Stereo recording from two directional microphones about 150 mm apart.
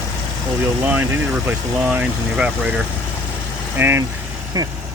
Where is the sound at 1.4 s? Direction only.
10° right (ahead or behind).